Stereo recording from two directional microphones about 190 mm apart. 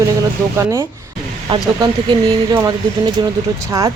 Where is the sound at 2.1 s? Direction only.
25° right (ahead or behind).